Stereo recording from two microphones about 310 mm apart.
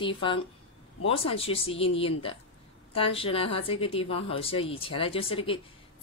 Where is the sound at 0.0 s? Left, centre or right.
Centre.